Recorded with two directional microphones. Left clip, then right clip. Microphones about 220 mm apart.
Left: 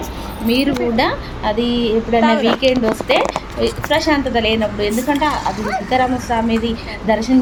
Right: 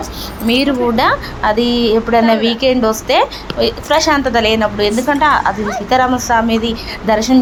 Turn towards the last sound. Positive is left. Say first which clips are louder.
# right 3 dB
turn(degrees=0)  # may be behind; listen again after turning